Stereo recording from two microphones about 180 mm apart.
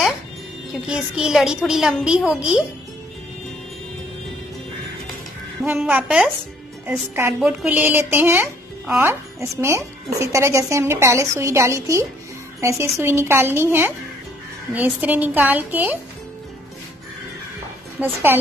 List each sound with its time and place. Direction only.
0.8 s a woman's voice: 5° right (ahead or behind)
5.8 s a woman's voice: 5° right (ahead or behind)
7.3 s speech: 5° right (ahead or behind)
17.9 s speech: 10° right (ahead or behind)